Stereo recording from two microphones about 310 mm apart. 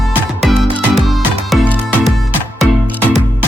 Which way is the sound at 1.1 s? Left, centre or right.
Centre.